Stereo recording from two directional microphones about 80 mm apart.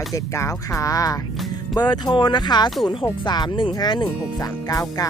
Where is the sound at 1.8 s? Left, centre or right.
Left.